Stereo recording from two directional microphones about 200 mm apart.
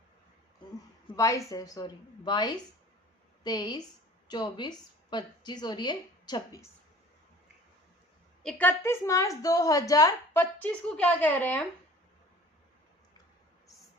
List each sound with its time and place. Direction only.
1.1 s a woman's voice: 15° left (ahead or behind)
8.4 s a woman's voice: 10° left (ahead or behind)